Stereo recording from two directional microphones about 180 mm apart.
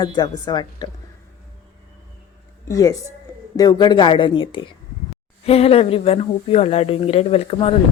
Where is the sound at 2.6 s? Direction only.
15° left (ahead or behind).